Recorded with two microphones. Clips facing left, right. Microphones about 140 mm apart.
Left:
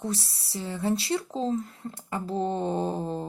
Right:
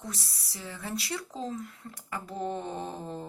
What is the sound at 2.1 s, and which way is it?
Mantra, 30° left (ahead or behind).